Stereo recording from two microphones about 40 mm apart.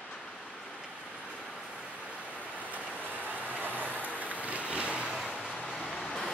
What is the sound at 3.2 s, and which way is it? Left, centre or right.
Vehicle, right.